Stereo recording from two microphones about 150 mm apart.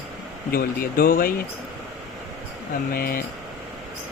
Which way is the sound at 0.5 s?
75° left (ahead or behind).